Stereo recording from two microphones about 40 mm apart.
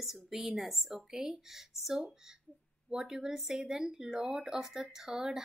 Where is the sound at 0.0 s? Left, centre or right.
Centre.